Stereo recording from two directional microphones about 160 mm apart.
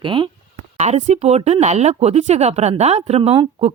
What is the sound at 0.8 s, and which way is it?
Speech, 45° right (ahead or behind).